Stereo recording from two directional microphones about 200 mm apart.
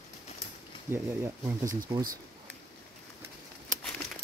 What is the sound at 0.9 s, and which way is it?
Speech, 15° right (ahead or behind).